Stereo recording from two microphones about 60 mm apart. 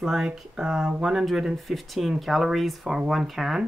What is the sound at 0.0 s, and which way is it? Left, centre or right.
Speech, centre.